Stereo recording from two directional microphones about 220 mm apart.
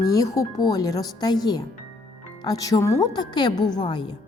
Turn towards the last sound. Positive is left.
turn(degrees=20)  # may be behind; listen again after turning